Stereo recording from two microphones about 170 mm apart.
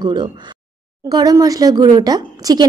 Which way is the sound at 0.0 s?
25° right (ahead or behind).